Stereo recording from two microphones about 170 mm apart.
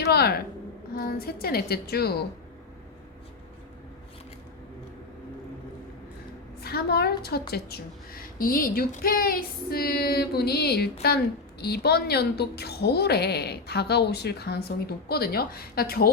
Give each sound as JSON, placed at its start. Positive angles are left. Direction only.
{"t": 0.0, "sound": "a woman's voice", "side_deg": 70}
{"t": 6.6, "sound": "a woman's voice", "side_deg": 65}